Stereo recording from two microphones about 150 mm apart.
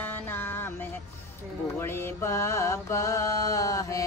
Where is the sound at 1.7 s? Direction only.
15° left (ahead or behind).